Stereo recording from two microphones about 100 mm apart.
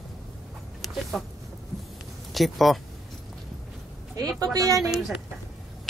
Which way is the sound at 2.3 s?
Centre (ahead or behind).